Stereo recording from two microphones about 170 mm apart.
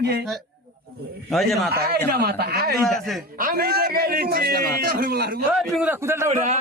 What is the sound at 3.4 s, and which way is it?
A man's voice, 60° right (ahead or behind).